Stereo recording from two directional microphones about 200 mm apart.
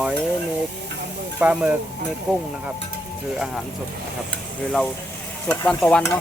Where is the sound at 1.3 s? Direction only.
5° right (ahead or behind).